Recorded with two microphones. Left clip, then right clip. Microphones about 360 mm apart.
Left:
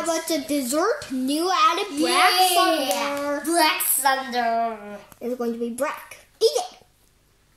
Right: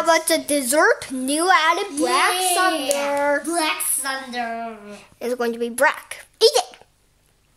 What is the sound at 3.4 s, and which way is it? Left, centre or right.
A child's voice, centre.